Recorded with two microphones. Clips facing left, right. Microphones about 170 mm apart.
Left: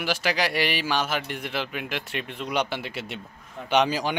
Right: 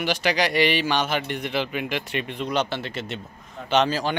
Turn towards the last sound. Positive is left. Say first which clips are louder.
# right 1 dB
turn(degrees=15)  # may be behind; listen again after turning